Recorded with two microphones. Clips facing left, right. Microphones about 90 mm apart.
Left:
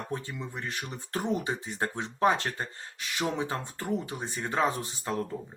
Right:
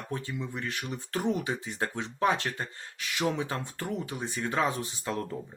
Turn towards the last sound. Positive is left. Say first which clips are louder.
# left 1 dB
turn(degrees=35)  # may be behind; listen again after turning